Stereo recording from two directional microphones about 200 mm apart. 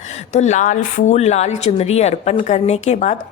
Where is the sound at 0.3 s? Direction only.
35° left (ahead or behind).